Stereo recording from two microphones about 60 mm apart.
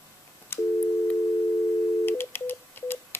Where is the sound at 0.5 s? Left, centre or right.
Left.